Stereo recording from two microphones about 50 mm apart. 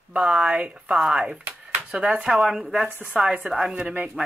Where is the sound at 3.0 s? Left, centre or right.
Centre.